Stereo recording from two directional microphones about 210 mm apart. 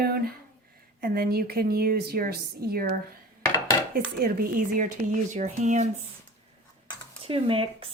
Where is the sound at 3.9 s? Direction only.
45° right (ahead or behind).